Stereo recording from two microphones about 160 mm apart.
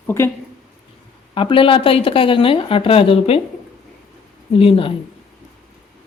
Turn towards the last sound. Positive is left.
turn(degrees=35)  # may be behind; listen again after turning